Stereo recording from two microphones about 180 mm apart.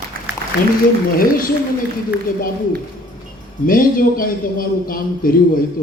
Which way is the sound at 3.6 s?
50° left (ahead or behind).